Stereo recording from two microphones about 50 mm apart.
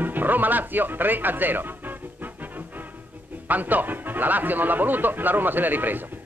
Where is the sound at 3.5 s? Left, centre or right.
Right.